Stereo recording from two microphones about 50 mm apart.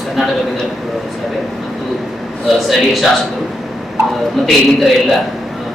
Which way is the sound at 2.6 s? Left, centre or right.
Centre.